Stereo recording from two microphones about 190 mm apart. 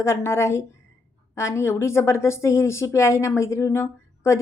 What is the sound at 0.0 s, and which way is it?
A woman's voice, 15° left (ahead or behind).